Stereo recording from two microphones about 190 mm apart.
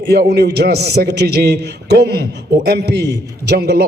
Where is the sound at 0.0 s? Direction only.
60° right (ahead or behind).